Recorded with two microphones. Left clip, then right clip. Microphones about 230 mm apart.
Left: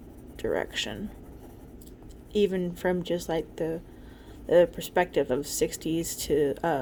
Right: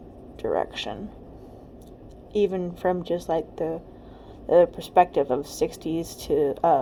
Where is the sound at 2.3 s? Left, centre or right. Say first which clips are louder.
Right 2 dB; left.